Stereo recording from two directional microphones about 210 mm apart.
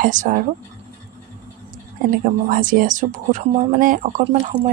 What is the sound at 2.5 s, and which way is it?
Speech, 40° right (ahead or behind).